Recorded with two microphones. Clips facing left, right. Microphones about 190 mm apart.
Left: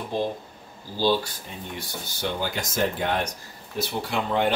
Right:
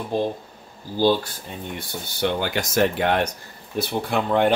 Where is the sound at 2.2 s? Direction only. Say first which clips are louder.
Right 5 dB; 70° right (ahead or behind).